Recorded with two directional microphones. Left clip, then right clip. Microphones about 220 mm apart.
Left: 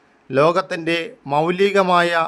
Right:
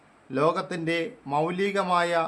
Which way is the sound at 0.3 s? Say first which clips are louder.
Left 9 dB; 35° left (ahead or behind).